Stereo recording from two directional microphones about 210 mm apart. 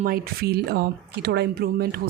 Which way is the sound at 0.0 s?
45° right (ahead or behind).